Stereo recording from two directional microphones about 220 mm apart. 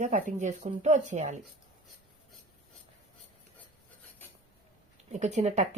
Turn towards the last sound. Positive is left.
turn(degrees=-30)  # may be behind; listen again after turning